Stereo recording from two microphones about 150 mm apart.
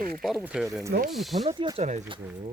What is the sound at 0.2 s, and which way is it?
Speech, centre (ahead or behind).